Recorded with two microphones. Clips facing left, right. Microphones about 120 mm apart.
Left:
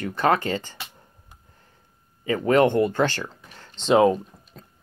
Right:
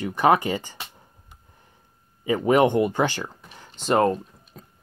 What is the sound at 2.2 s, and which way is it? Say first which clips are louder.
Speech: even; 15° right (ahead or behind).